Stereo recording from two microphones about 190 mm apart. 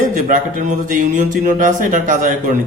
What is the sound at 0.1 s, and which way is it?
A man's voice, 40° right (ahead or behind).